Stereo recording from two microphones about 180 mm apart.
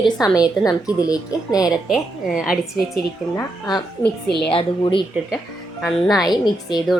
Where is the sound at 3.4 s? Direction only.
20° left (ahead or behind).